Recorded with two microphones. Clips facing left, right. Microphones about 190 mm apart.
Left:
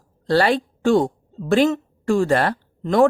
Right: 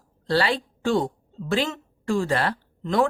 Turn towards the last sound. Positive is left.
turn(degrees=50)  # may be behind; listen again after turning